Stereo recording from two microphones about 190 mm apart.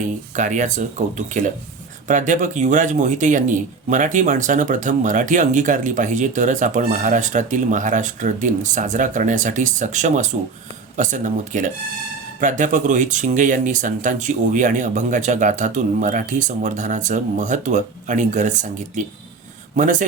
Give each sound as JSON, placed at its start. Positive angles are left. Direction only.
{"t": 0.3, "sound": "a man's voice", "side_deg": -40}